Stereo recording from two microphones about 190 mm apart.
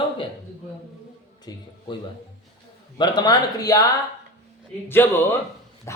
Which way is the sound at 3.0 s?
20° left (ahead or behind).